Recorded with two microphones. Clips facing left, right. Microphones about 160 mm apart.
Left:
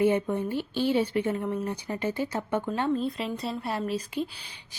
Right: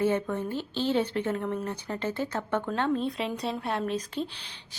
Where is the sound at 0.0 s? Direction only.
15° left (ahead or behind).